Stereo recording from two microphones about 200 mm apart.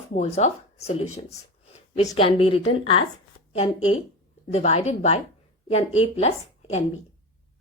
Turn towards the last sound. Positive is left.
turn(degrees=30)  # may be behind; listen again after turning